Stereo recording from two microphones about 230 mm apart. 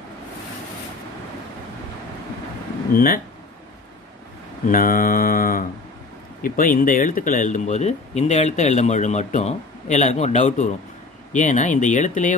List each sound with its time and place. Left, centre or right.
2.9 s speech: left
4.6 s speech: left